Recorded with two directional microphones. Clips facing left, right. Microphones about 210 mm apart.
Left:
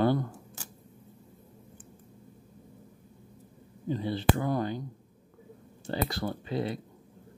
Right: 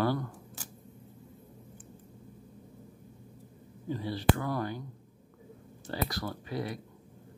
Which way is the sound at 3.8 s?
20° left (ahead or behind).